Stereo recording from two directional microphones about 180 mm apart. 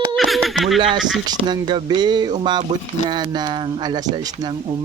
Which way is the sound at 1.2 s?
25° right (ahead or behind).